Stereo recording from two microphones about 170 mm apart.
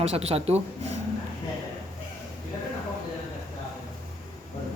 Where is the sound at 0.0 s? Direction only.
35° right (ahead or behind).